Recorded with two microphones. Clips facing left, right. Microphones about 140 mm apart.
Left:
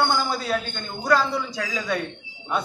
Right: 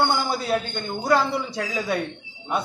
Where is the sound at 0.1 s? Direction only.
20° right (ahead or behind).